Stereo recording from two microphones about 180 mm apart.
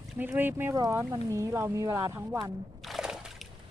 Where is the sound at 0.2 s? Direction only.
10° right (ahead or behind).